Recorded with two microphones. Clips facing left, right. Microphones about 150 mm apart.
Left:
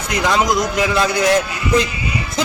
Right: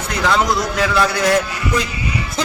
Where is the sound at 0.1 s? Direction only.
15° left (ahead or behind).